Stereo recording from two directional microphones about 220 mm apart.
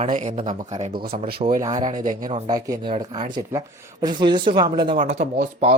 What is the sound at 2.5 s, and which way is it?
Speech, 15° right (ahead or behind).